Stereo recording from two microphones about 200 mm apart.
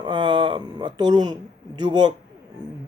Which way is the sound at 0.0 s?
25° right (ahead or behind).